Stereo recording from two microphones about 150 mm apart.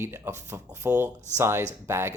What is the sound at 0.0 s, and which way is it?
Speech, 15° right (ahead or behind).